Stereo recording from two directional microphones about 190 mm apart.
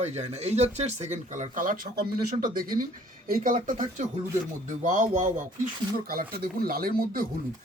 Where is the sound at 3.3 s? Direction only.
45° right (ahead or behind).